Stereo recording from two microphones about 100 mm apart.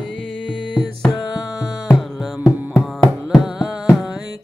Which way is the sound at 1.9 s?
5° right (ahead or behind).